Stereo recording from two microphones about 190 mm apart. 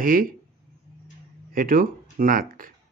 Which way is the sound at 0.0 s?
50° right (ahead or behind).